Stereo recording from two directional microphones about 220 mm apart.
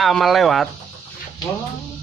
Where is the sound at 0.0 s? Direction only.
Centre (ahead or behind).